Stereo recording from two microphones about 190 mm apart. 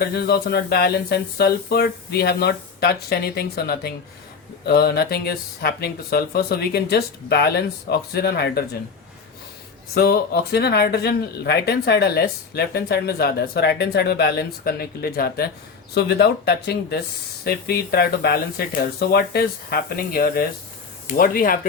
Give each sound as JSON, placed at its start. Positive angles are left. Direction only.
{"t": 0.1, "sound": "speech", "side_deg": 55}
{"t": 9.9, "sound": "speech", "side_deg": 55}